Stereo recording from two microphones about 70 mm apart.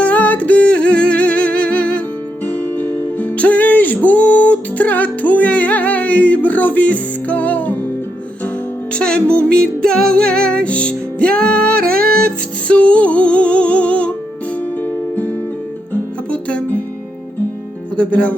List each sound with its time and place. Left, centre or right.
0.0 s music: left
8.9 s music: centre
16.3 s music: centre
17.9 s speech: centre